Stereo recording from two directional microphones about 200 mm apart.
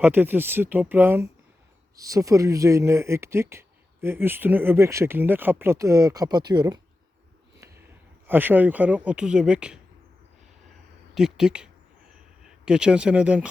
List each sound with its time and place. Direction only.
0.0 s speech: 10° right (ahead or behind)
8.3 s speech: 10° right (ahead or behind)
11.1 s speech: centre (ahead or behind)